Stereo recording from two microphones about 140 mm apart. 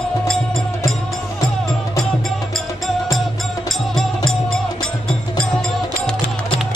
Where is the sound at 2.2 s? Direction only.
Centre (ahead or behind).